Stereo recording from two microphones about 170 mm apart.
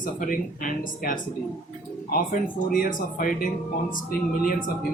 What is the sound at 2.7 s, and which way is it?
Speech, 55° left (ahead or behind).